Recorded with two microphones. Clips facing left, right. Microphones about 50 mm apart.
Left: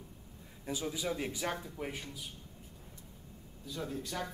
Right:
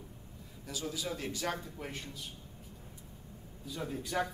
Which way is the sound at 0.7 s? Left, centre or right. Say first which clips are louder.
Left 2 dB; left.